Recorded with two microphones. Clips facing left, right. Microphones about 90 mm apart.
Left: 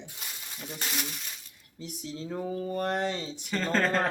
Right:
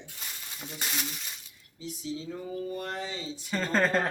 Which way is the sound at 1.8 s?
65° left (ahead or behind).